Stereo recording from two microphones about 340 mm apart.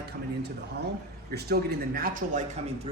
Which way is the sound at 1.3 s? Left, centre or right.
Right.